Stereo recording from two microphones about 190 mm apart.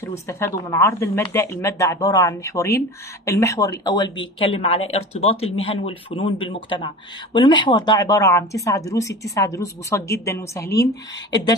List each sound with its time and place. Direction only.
0.3 s speech: 15° left (ahead or behind)